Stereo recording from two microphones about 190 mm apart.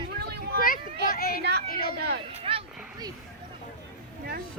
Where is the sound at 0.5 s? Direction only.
50° left (ahead or behind).